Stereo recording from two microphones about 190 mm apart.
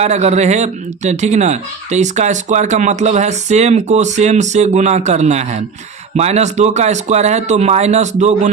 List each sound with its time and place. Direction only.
0.0 s speech: 35° right (ahead or behind)